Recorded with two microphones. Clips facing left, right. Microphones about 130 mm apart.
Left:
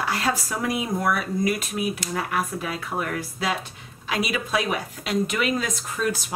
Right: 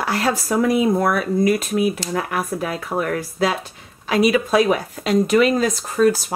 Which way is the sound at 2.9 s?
30° right (ahead or behind).